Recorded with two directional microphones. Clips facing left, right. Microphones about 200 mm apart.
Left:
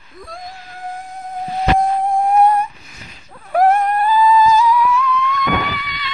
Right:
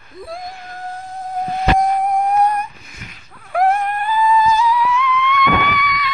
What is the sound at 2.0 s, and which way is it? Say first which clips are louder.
Music: left 2 dB; 30° left (ahead or behind).